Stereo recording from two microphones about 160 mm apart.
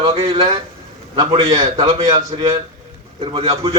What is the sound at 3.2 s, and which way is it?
Speech, 35° right (ahead or behind).